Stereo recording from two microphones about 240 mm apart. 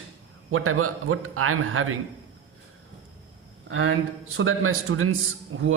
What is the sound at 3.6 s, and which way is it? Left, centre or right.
A man's voice, right.